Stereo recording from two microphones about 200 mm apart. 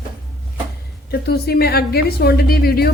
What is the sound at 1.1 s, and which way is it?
A woman's voice, 50° left (ahead or behind).